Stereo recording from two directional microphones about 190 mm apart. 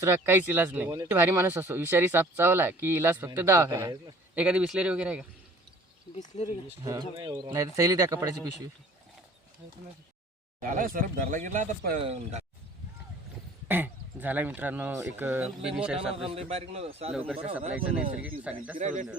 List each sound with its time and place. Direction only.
0.0 s speech: 10° right (ahead or behind)
6.3 s speech: 30° left (ahead or behind)
6.7 s speech: 15° right (ahead or behind)
10.6 s speech: 45° right (ahead or behind)
12.0 s a man's voice: 35° right (ahead or behind)
13.7 s a man's voice: 10° right (ahead or behind)
16.3 s a man's voice: 30° right (ahead or behind)
17.7 s speech: 5° right (ahead or behind)
18.8 s a man's voice: 40° right (ahead or behind)